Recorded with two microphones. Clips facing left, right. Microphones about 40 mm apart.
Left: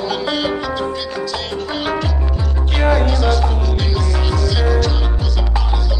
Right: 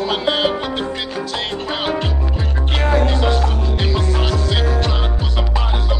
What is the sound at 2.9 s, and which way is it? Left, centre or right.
Music, right.